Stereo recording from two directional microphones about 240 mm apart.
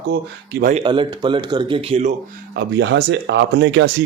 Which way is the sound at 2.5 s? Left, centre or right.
Right.